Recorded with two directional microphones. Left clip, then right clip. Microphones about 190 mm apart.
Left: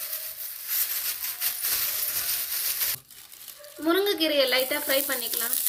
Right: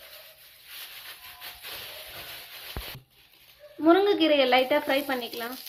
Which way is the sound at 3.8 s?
20° right (ahead or behind).